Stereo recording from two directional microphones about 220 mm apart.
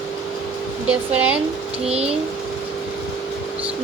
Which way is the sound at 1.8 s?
25° right (ahead or behind).